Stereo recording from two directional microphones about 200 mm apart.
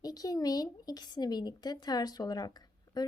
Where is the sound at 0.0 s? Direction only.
20° left (ahead or behind).